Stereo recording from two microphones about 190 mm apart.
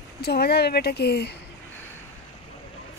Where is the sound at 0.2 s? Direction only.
55° left (ahead or behind).